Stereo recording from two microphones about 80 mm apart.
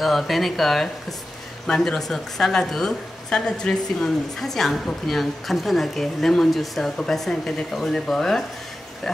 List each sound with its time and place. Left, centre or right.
0.0 s a woman's voice: centre